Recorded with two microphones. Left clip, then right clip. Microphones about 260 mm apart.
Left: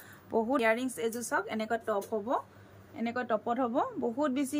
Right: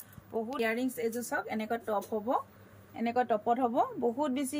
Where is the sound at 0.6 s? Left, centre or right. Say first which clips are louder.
Left 3 dB; centre.